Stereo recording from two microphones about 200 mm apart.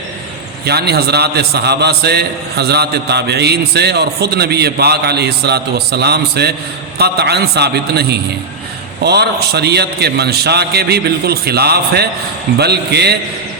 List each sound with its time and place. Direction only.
0.6 s a man's voice: 55° right (ahead or behind)